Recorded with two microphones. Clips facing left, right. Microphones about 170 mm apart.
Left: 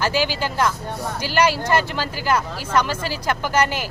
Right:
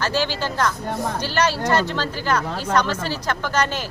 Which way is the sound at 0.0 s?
10° left (ahead or behind).